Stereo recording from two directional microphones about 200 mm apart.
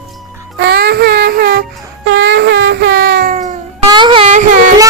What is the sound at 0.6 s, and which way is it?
Music, 55° right (ahead or behind).